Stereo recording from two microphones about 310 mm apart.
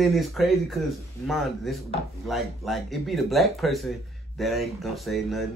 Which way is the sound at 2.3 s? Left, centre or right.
Centre.